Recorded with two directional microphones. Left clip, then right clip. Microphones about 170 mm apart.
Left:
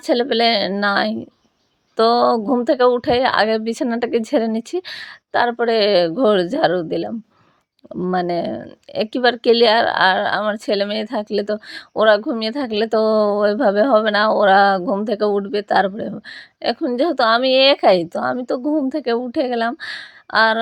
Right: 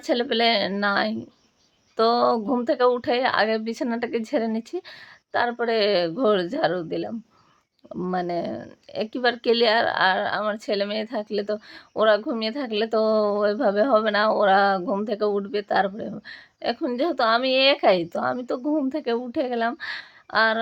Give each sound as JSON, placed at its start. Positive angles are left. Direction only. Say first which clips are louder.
{"t": 0.0, "sound": "speech", "louder": "left 5 dB", "side_deg": 40}